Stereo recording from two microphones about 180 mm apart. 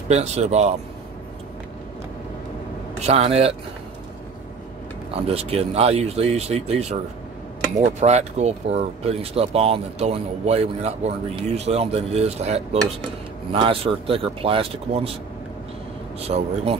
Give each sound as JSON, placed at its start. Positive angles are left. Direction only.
{"t": 0.1, "sound": "speech", "side_deg": -35}
{"t": 3.0, "sound": "speech", "side_deg": -35}
{"t": 5.1, "sound": "speech", "side_deg": -35}
{"t": 16.3, "sound": "speech", "side_deg": -35}